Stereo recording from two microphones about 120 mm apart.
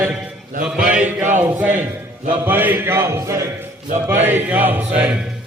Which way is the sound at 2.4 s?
15° right (ahead or behind).